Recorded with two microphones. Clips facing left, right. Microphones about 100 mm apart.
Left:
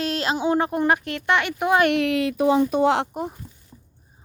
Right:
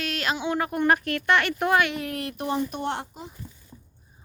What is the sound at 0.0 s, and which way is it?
Speech, 30° left (ahead or behind).